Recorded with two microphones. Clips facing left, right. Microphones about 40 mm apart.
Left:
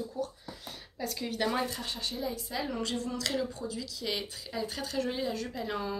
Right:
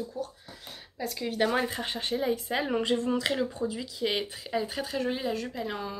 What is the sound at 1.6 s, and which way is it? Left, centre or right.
Speech, right.